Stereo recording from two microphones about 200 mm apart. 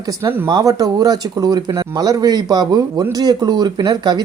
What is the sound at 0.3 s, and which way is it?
Speech, 15° right (ahead or behind).